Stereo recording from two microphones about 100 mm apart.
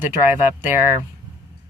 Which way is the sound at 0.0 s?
20° right (ahead or behind).